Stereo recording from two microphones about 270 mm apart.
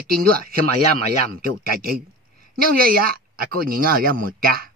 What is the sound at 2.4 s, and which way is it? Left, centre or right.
A woman's voice, right.